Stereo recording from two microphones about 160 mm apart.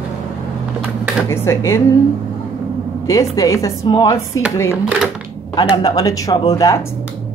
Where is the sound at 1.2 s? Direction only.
15° left (ahead or behind).